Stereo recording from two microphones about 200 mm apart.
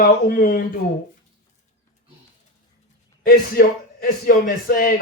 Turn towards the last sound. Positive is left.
turn(degrees=45)  # may be behind; listen again after turning